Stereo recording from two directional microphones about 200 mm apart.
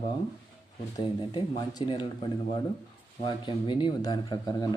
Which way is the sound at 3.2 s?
25° left (ahead or behind).